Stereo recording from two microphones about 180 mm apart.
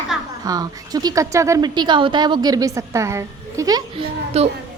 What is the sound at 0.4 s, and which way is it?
Speech, 20° right (ahead or behind).